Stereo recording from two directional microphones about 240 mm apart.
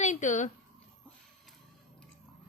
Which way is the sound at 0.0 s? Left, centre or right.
Left.